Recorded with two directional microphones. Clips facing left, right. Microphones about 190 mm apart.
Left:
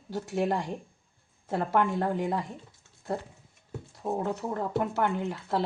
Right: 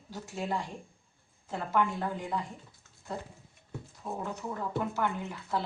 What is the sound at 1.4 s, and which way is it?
Speech, 60° left (ahead or behind).